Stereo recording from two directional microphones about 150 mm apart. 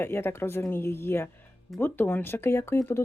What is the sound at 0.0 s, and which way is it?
Speech, 15° left (ahead or behind).